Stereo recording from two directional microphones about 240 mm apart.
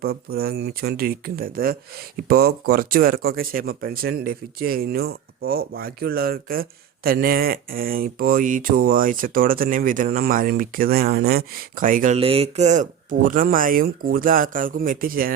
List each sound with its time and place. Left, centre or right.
0.3 s speech: right